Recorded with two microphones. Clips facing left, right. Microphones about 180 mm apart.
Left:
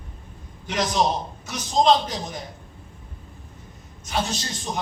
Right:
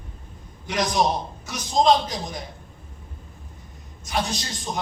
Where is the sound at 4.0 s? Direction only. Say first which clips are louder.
Even; 15° right (ahead or behind).